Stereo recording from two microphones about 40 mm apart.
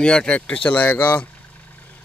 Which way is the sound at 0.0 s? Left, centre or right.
Left.